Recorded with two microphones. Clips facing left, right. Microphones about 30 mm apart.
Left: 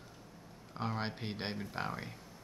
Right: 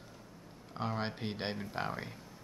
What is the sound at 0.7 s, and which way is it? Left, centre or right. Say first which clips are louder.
Speech: right 1 dB; centre.